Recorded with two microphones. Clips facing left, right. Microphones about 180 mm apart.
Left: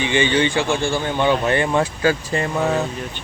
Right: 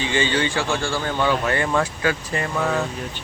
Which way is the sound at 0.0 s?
20° left (ahead or behind).